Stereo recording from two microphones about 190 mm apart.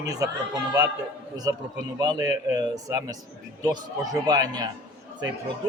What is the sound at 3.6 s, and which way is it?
A man's voice, 20° right (ahead or behind).